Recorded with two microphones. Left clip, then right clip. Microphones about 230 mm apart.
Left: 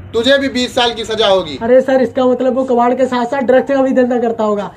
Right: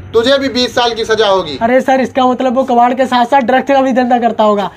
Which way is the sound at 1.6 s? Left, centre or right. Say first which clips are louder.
Left 1 dB; right.